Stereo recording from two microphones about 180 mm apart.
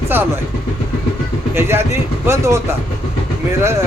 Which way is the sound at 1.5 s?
15° right (ahead or behind).